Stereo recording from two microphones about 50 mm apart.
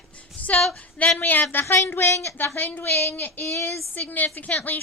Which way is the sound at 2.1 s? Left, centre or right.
Left.